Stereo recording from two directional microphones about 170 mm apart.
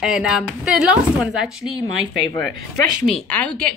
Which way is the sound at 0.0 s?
5° right (ahead or behind).